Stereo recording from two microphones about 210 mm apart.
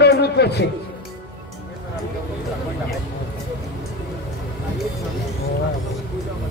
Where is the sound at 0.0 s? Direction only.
50° left (ahead or behind).